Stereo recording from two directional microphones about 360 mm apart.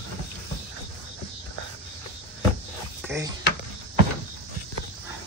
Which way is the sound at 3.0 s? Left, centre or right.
Centre.